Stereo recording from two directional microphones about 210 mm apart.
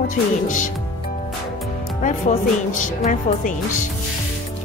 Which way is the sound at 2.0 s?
35° left (ahead or behind).